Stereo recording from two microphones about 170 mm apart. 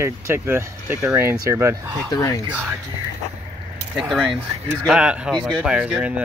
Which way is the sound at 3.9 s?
Centre (ahead or behind).